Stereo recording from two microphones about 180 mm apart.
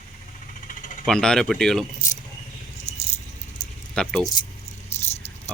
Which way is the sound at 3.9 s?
Centre (ahead or behind).